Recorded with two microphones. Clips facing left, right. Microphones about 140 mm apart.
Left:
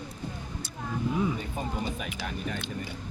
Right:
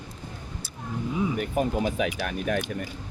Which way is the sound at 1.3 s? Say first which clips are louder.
Right 8 dB; 75° right (ahead or behind).